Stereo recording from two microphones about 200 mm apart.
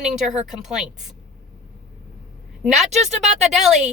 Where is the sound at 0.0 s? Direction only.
5° right (ahead or behind).